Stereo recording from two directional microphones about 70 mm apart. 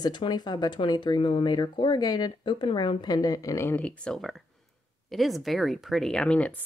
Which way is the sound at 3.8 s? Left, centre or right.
Centre.